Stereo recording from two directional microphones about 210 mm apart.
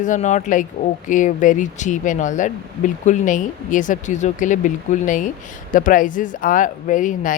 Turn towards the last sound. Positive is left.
turn(degrees=40)  # may be behind; listen again after turning